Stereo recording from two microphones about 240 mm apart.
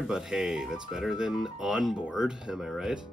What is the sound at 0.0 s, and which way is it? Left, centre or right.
Speech, centre.